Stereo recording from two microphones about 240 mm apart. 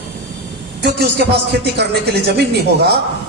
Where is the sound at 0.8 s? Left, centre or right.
Right.